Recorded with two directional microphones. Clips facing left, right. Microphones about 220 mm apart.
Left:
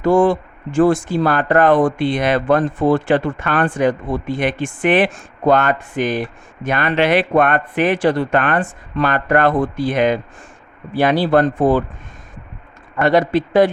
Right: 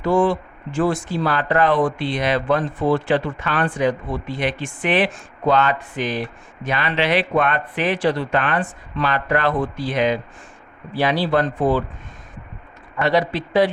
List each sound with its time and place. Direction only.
0.0 s speech: 45° left (ahead or behind)
13.0 s speech: 50° left (ahead or behind)